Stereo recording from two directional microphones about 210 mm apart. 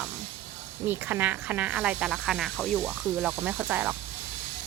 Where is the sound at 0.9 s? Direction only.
10° right (ahead or behind).